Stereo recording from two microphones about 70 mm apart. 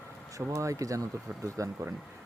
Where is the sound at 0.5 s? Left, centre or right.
Right.